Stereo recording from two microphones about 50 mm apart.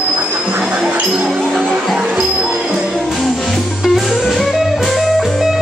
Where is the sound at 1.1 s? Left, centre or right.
Centre.